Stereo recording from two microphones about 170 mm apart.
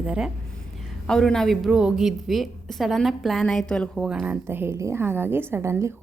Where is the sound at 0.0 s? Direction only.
5° right (ahead or behind).